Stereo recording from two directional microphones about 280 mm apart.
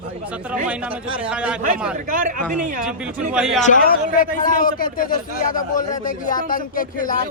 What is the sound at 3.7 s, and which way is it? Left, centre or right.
A man's voice, left.